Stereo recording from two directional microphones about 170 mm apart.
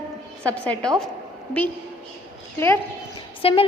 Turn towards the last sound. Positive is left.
turn(degrees=35)  # may be behind; listen again after turning